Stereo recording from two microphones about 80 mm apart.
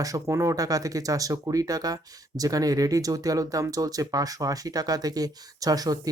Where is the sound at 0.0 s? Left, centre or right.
Right.